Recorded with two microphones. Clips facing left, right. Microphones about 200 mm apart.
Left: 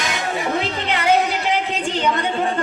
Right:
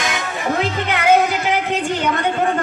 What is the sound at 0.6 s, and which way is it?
Music, 50° right (ahead or behind).